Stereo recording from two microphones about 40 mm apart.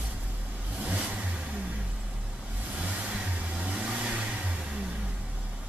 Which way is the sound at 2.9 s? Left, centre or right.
Right.